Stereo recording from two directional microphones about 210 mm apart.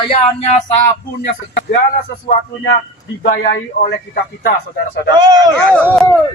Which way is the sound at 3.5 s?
45° left (ahead or behind).